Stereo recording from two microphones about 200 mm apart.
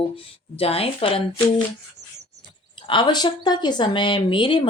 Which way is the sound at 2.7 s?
25° left (ahead or behind).